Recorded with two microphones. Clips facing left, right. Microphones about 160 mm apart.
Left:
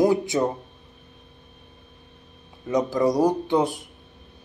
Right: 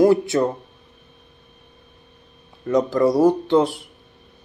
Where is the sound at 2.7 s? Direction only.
15° left (ahead or behind).